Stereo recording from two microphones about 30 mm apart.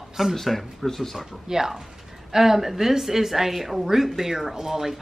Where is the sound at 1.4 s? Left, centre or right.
Centre.